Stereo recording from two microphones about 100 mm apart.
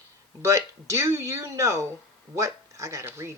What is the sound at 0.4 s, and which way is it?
Speech, 30° right (ahead or behind).